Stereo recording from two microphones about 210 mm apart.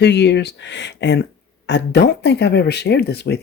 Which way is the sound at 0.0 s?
55° left (ahead or behind).